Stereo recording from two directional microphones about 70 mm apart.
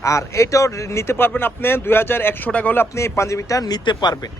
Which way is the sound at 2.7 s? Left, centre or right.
Left.